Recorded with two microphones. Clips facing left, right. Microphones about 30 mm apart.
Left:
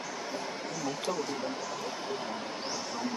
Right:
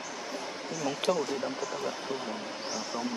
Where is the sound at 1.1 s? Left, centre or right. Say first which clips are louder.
Right 6 dB; right.